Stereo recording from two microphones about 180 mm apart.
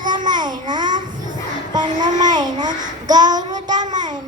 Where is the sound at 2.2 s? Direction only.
25° right (ahead or behind).